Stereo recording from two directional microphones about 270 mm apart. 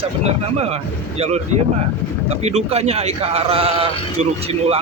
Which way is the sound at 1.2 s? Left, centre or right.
Right.